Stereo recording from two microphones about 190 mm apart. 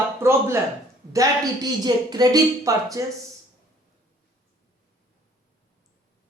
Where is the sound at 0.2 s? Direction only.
15° right (ahead or behind).